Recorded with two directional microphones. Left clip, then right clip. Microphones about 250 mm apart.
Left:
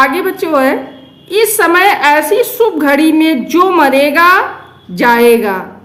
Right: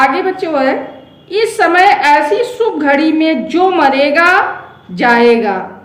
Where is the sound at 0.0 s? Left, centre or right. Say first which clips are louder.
Left 1 dB; left.